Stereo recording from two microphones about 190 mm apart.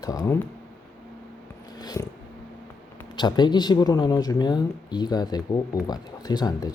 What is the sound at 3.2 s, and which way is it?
Speech, 25° left (ahead or behind).